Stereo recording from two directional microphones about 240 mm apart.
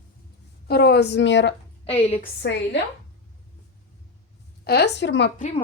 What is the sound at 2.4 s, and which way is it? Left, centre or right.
Speech, left.